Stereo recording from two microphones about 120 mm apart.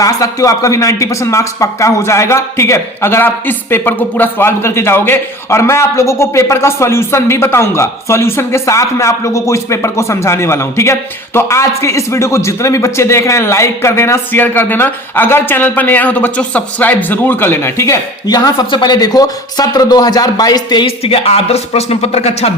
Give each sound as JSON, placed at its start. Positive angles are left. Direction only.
{"t": 0.0, "sound": "speech", "side_deg": 30}
{"t": 20.8, "sound": "speech", "side_deg": 55}